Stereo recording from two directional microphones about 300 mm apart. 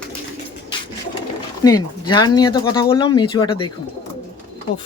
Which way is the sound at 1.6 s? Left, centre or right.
Centre.